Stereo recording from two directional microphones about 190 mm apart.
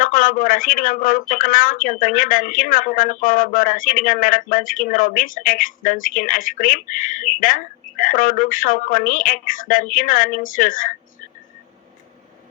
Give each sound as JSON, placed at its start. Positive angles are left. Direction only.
{"t": 0.0, "sound": "speech", "side_deg": 45}